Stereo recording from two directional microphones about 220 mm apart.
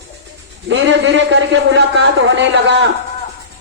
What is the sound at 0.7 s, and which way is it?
A man's voice, 55° right (ahead or behind).